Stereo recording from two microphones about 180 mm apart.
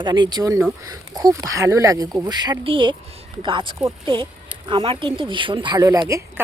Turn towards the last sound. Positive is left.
turn(degrees=-15)  # may be behind; listen again after turning